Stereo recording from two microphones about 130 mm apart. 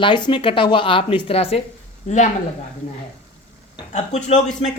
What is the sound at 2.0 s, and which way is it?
Speech, 60° left (ahead or behind).